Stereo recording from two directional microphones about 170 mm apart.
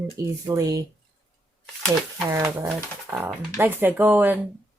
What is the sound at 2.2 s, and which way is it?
Speech, 15° right (ahead or behind).